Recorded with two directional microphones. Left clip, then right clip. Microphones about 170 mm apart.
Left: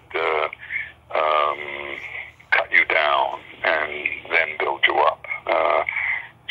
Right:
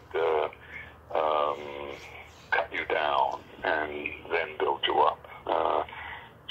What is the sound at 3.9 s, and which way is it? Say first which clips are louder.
Speech: left 9 dB; 90° left.